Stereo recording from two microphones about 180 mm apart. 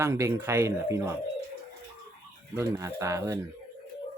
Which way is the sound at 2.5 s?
15° right (ahead or behind).